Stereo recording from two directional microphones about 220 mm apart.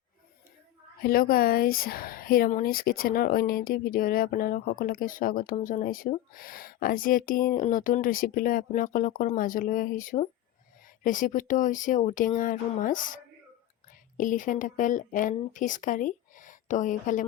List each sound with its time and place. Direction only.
1.0 s speech: 40° left (ahead or behind)
14.2 s speech: 35° left (ahead or behind)